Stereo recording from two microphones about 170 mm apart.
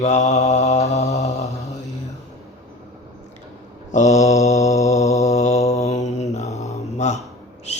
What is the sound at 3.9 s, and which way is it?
Mantra, 45° left (ahead or behind).